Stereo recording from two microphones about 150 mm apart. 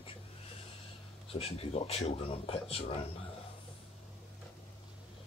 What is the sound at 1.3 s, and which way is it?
Speech, 40° left (ahead or behind).